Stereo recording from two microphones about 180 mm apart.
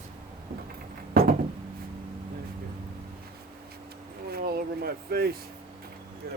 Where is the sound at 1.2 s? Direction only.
55° right (ahead or behind).